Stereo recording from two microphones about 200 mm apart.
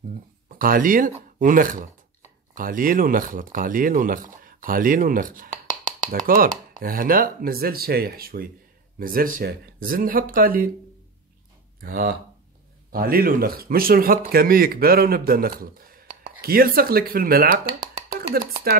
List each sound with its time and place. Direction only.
0.5 s speech: 45° right (ahead or behind)
11.8 s speech: 45° right (ahead or behind)
18.1 s chopping: 50° right (ahead or behind)